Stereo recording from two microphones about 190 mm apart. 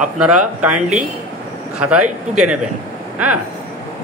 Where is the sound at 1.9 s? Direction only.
5° right (ahead or behind).